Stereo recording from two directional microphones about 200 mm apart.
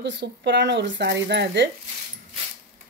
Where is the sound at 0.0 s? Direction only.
60° right (ahead or behind).